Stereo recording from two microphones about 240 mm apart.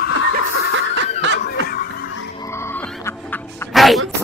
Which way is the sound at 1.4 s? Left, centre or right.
Left.